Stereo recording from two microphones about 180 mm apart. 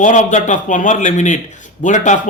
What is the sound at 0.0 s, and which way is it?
Speech, 45° left (ahead or behind).